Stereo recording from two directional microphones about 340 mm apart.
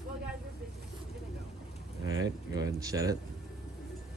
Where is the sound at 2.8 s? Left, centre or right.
Centre.